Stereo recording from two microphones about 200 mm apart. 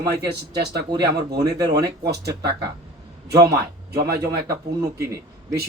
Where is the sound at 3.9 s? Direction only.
50° right (ahead or behind).